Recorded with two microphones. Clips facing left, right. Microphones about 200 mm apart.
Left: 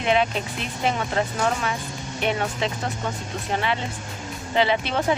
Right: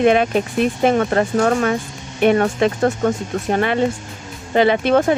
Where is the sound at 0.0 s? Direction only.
50° right (ahead or behind).